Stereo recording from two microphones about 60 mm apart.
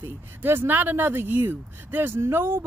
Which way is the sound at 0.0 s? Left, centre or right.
Right.